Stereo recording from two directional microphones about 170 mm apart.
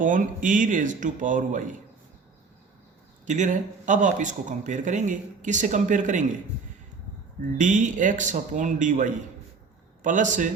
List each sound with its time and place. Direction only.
0.0 s speech: 50° right (ahead or behind)
3.2 s speech: 45° right (ahead or behind)
7.6 s speech: 45° right (ahead or behind)